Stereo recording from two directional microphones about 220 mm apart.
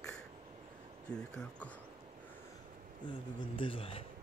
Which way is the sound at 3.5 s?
25° left (ahead or behind).